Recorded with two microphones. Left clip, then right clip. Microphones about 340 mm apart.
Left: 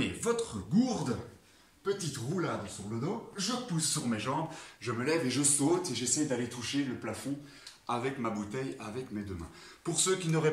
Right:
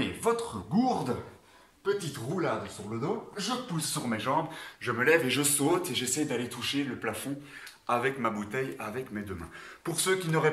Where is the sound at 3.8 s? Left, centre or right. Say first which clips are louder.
Right 1 dB; centre.